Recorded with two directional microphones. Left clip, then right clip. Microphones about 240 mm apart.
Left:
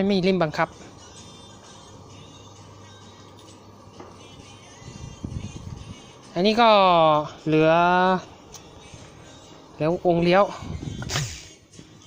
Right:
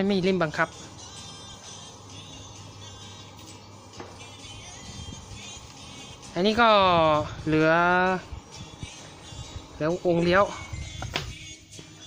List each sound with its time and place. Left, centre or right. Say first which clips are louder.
0.0 s speech: left 3 dB; centre
6.3 s speech: left 3 dB; centre
9.7 s speech: left 3 dB; centre